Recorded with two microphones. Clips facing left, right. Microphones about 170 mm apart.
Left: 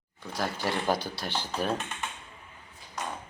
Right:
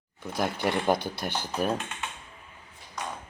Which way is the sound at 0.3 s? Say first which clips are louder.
Right 3 dB; 20° right (ahead or behind).